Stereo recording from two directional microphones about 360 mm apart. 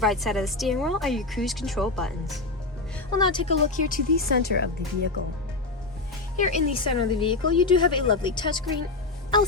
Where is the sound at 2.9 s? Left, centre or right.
Centre.